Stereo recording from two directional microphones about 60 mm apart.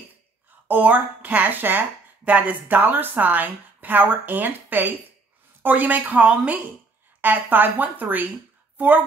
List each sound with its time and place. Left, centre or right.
0.7 s a woman's voice: right